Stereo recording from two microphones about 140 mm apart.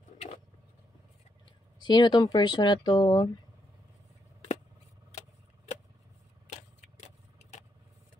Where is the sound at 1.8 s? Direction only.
30° left (ahead or behind).